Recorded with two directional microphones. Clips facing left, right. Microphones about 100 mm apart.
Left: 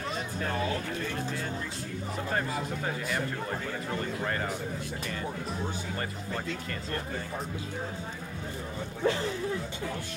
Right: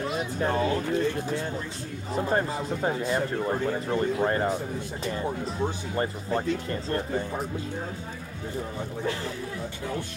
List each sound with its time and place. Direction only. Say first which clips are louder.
0.4 s speech: right 6 dB; 30° right (ahead or behind)
5.9 s speech: right 7 dB; 30° right (ahead or behind)